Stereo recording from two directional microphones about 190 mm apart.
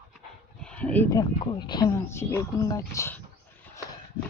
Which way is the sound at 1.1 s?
25° left (ahead or behind).